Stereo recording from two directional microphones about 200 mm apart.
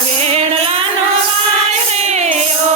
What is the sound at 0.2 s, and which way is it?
Music, 30° right (ahead or behind).